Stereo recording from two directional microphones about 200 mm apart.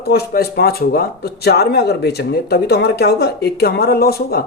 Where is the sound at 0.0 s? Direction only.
50° left (ahead or behind).